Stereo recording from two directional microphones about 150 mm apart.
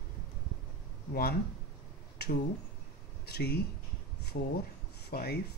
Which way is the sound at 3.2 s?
90° left.